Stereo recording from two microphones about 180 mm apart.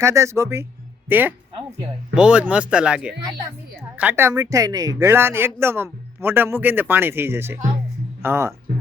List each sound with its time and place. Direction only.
0.0 s speech: 15° right (ahead or behind)